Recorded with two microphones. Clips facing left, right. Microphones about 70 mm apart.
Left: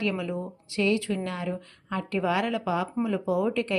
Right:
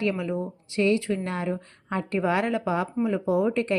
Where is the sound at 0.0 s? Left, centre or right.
Right.